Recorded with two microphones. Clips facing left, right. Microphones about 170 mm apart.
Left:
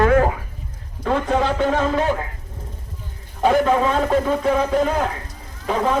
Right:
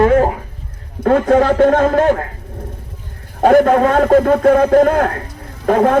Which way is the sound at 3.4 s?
55° right (ahead or behind).